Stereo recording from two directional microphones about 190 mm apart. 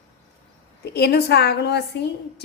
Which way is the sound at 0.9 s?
60° left (ahead or behind).